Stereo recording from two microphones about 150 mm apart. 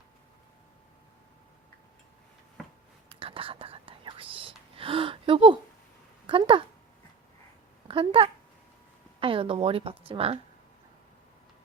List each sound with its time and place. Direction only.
3.2 s whispering: 35° right (ahead or behind)
6.2 s speech: 35° right (ahead or behind)
7.9 s a woman's voice: 40° right (ahead or behind)